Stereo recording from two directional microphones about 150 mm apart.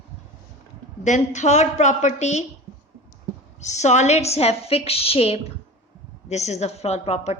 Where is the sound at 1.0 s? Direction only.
50° left (ahead or behind).